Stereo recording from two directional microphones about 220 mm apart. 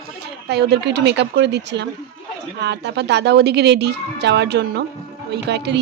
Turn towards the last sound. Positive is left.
turn(degrees=-50)  # may be behind; listen again after turning